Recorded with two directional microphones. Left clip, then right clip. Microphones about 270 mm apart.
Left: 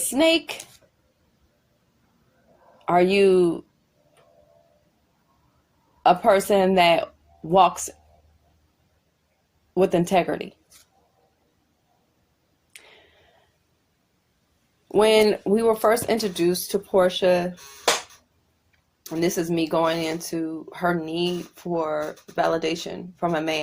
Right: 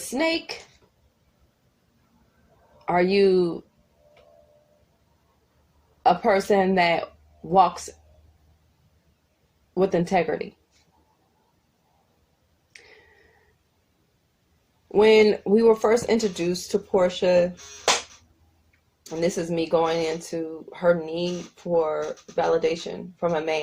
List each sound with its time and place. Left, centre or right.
0.1 s speech: left
2.8 s speech: left
6.0 s speech: left
9.7 s speech: left
15.0 s speech: left
19.0 s speech: left